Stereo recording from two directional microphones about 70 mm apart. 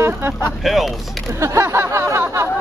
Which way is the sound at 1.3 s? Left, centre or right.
Right.